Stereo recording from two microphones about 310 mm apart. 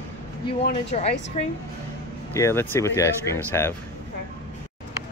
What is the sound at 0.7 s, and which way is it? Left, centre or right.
Speech, left.